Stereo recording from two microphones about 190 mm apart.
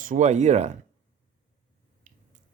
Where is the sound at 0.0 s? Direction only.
40° right (ahead or behind).